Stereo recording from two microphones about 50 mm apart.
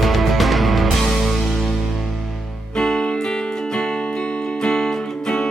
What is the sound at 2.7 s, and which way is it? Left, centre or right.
Music, centre.